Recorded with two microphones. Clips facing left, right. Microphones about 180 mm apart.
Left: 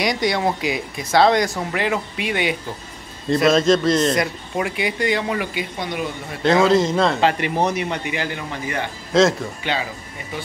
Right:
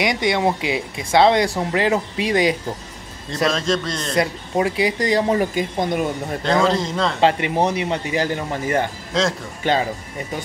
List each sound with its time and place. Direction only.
0.0 s speech: 20° right (ahead or behind)
3.5 s a man's voice: 5° left (ahead or behind)
4.1 s speech: 30° right (ahead or behind)
6.4 s a man's voice: 5° left (ahead or behind)
7.2 s speech: 25° right (ahead or behind); by 9.8 s 45° right (ahead or behind)